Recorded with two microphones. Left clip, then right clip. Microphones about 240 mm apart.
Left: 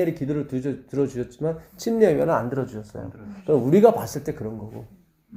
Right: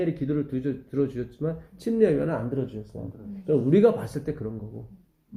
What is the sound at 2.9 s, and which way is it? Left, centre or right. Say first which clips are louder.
Speech: left 5 dB; left.